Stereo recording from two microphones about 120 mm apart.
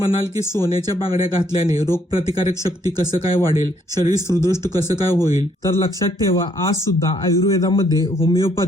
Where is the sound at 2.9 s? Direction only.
30° right (ahead or behind).